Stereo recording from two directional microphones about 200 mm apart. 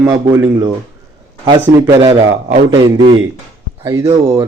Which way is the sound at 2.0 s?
20° right (ahead or behind).